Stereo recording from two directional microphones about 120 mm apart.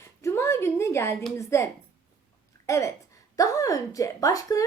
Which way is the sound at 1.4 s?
25° left (ahead or behind).